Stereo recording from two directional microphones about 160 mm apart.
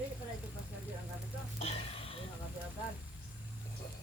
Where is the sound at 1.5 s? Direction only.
40° left (ahead or behind).